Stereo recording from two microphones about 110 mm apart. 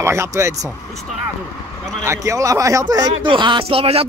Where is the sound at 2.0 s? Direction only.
25° right (ahead or behind).